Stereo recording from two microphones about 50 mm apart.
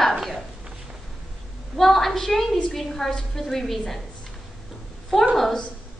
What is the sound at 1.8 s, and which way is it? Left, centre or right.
A woman's voice, centre.